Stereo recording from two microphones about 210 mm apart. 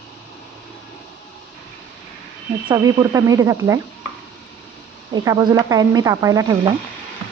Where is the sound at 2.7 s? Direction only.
15° right (ahead or behind).